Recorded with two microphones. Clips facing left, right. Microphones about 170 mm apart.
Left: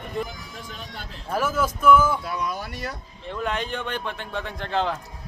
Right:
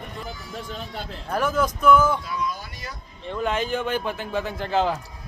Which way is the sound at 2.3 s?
60° left (ahead or behind).